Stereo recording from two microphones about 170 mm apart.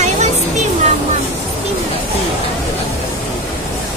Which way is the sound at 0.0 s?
45° right (ahead or behind).